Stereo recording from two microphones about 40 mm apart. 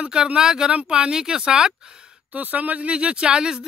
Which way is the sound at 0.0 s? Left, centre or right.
Right.